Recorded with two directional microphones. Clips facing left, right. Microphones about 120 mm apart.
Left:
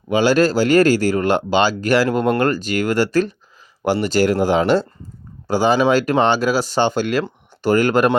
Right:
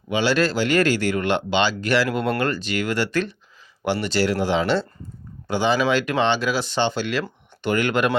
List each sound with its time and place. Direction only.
0.1 s speech: 45° left (ahead or behind)